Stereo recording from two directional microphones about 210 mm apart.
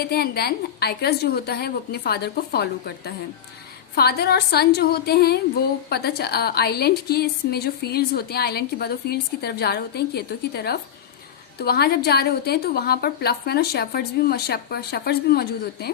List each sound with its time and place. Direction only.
0.0 s a woman's voice: 50° left (ahead or behind)